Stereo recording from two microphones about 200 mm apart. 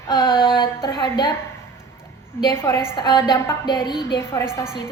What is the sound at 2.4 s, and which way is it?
Speech, 10° left (ahead or behind).